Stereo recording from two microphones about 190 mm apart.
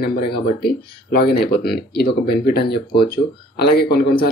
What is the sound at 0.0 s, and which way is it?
Speech, 55° left (ahead or behind).